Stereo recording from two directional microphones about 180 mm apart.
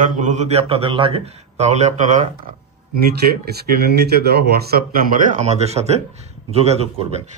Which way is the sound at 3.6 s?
65° right (ahead or behind).